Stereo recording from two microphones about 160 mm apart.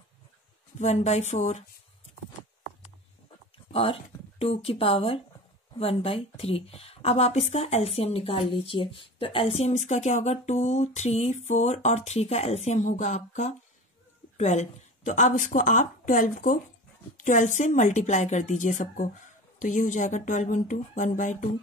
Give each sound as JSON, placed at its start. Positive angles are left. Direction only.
{"t": 0.7, "sound": "a woman's voice", "side_deg": 45}
{"t": 3.7, "sound": "a woman's voice", "side_deg": 35}